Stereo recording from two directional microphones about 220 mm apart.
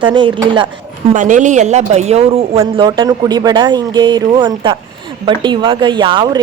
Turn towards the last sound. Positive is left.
turn(degrees=-20)  # may be behind; listen again after turning